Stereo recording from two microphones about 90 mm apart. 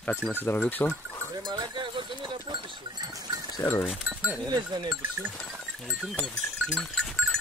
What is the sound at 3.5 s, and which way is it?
Speech, 40° left (ahead or behind).